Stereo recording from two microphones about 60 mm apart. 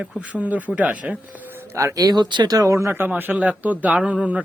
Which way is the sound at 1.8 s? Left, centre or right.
Right.